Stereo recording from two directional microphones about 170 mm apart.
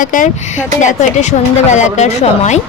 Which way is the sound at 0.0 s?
50° left (ahead or behind).